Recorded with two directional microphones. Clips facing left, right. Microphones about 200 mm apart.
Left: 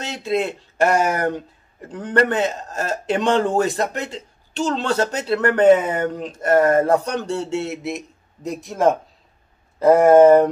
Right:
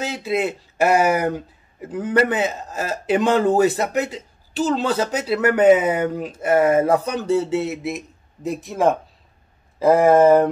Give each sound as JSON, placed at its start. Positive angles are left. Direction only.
{"t": 0.0, "sound": "speech", "side_deg": -5}